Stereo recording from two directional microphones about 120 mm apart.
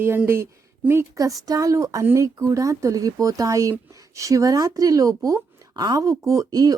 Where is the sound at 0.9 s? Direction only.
25° right (ahead or behind).